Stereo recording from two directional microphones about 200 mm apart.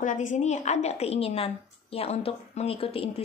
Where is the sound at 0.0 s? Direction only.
40° left (ahead or behind).